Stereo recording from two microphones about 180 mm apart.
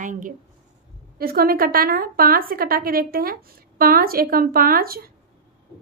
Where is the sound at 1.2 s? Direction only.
55° right (ahead or behind).